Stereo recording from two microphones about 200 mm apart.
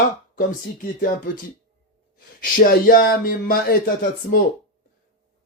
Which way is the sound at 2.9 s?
45° left (ahead or behind).